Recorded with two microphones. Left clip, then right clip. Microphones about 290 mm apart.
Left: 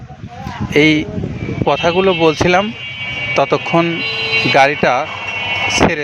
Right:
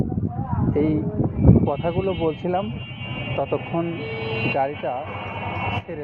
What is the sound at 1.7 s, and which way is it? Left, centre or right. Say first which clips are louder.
Speech: left 11 dB; left.